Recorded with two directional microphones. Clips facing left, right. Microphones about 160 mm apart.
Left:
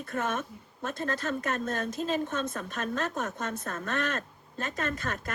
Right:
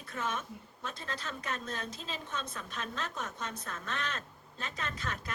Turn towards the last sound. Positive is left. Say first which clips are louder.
# left 6 dB
turn(degrees=50)  # may be behind; listen again after turning